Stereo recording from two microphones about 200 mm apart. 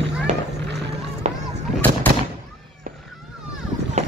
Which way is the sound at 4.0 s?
35° right (ahead or behind).